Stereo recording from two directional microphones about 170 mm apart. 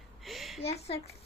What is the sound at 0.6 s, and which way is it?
Speech, 35° left (ahead or behind).